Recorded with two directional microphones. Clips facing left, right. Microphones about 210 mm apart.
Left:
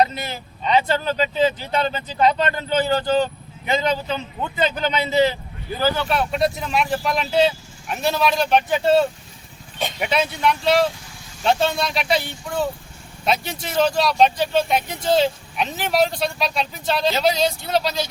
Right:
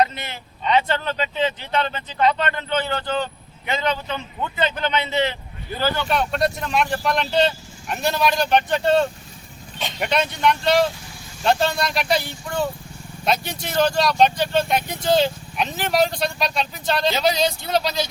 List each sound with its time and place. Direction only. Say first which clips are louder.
0.3 s speech: left 1 dB; 35° left (ahead or behind)
4.1 s a man's voice: left 2 dB; 10° left (ahead or behind)
4.8 s speech: left 5 dB; 35° left (ahead or behind)
5.8 s speech: left 1 dB; 5° left (ahead or behind)